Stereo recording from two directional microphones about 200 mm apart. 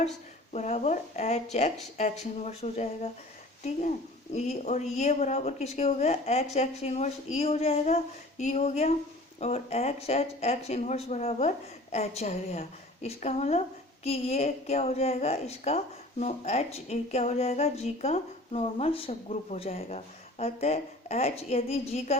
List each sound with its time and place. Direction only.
0.5 s a woman's voice: 35° left (ahead or behind)